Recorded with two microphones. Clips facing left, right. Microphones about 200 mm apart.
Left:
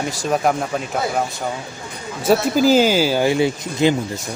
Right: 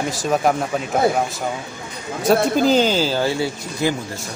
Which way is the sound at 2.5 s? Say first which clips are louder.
Left 2 dB; 5° left (ahead or behind).